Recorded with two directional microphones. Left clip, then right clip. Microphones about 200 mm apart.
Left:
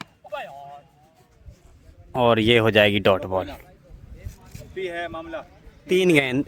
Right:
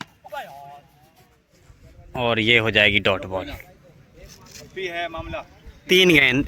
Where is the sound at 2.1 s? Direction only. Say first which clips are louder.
Left 1 dB; 30° left (ahead or behind).